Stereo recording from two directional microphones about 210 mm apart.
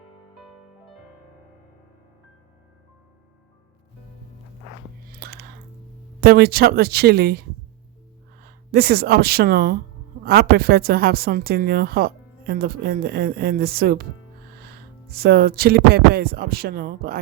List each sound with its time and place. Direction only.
5.2 s a sound: 50° right (ahead or behind)
6.1 s a woman's voice: 45° right (ahead or behind)
8.7 s a woman's voice: 50° right (ahead or behind)
15.1 s a woman's voice: 45° right (ahead or behind)